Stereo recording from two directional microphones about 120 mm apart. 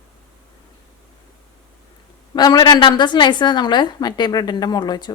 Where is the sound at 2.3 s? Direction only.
35° left (ahead or behind).